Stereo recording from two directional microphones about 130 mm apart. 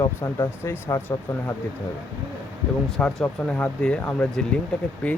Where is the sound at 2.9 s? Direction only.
Centre (ahead or behind).